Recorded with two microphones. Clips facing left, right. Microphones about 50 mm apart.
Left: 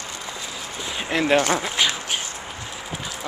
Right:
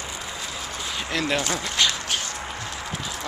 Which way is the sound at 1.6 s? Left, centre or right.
Centre.